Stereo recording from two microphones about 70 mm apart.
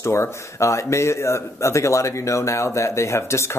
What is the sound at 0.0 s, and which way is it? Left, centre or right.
Speech, left.